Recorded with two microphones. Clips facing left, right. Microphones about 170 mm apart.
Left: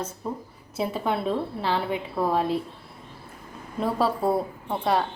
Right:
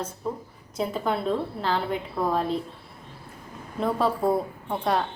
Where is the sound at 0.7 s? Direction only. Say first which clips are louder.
Even; 5° left (ahead or behind).